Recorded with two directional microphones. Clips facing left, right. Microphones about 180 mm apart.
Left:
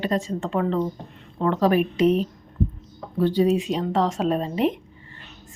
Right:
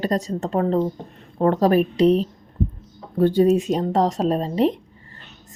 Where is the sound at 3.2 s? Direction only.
45° right (ahead or behind).